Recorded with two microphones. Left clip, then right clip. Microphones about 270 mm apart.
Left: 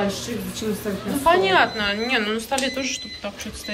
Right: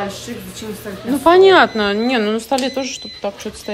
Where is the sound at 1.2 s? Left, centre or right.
Right.